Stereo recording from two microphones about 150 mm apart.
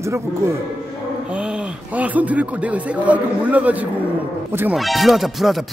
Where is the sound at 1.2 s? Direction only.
5° right (ahead or behind).